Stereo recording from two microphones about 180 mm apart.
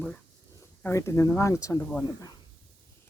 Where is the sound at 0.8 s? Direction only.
15° left (ahead or behind).